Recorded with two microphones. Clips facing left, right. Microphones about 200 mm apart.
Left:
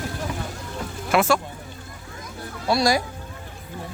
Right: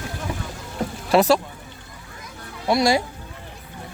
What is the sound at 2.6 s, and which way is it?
Speech, 20° right (ahead or behind).